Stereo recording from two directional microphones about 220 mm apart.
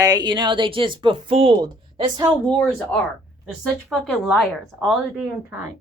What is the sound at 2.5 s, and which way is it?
A woman's voice, 5° left (ahead or behind).